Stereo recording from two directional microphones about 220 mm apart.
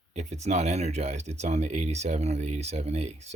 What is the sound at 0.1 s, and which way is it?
Speech, 30° right (ahead or behind).